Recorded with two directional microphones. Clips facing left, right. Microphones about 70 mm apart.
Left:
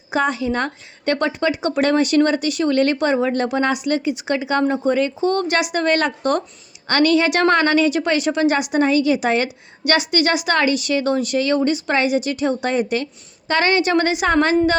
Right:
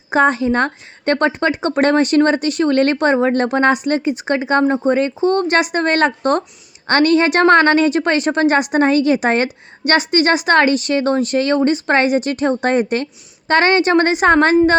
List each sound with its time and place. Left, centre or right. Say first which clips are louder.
0.1 s a woman's voice: right 5 dB; right